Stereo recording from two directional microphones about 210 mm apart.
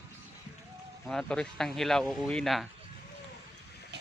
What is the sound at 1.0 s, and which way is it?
Speech, 5° left (ahead or behind).